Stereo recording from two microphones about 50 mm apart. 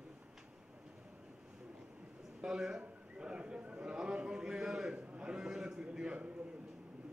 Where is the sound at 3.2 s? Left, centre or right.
Centre.